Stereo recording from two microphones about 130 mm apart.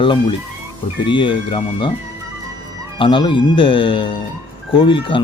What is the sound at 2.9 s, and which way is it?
Speech, 40° left (ahead or behind).